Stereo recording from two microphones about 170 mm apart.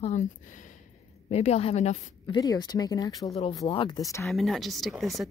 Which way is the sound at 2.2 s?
25° left (ahead or behind).